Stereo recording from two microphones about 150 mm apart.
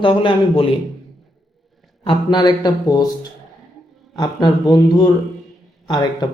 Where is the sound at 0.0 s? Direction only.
35° left (ahead or behind).